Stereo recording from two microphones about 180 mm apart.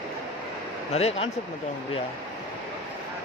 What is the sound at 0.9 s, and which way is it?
Speech, 35° left (ahead or behind).